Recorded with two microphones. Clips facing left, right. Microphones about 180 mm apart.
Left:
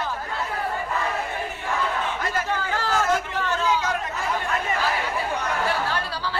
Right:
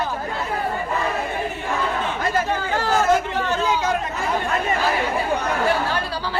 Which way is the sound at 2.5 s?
20° right (ahead or behind).